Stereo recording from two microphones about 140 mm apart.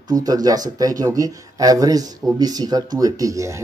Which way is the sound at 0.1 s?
25° right (ahead or behind).